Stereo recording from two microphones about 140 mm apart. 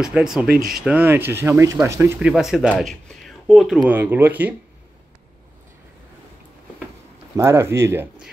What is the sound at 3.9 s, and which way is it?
Speech, 15° right (ahead or behind).